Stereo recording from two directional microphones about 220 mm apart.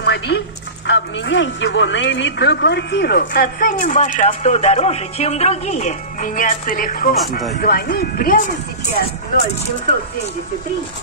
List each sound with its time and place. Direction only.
0.0 s a sound: 50° left (ahead or behind)
0.8 s speech: 55° left (ahead or behind); by 7.2 s 40° left (ahead or behind)
7.2 s speech: centre (ahead or behind)
7.5 s speech: 45° left (ahead or behind)